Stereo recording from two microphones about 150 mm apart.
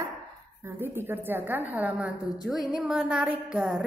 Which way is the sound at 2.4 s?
Centre (ahead or behind).